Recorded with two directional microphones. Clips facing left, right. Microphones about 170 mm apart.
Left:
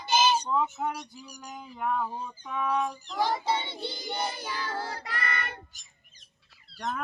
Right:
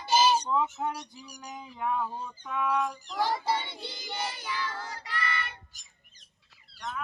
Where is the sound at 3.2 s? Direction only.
20° left (ahead or behind).